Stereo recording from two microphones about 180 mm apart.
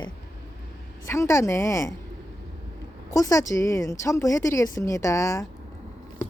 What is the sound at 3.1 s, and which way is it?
A woman's voice, 15° left (ahead or behind).